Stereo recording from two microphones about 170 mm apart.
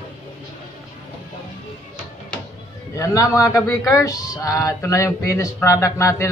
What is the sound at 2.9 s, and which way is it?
A man's voice, 20° left (ahead or behind).